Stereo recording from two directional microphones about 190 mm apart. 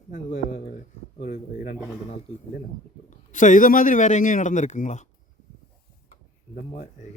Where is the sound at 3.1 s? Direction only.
40° left (ahead or behind).